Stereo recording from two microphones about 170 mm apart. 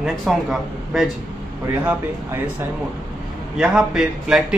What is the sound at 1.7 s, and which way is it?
Speech, 15° right (ahead or behind).